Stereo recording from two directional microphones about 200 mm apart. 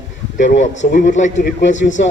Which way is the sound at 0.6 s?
40° left (ahead or behind).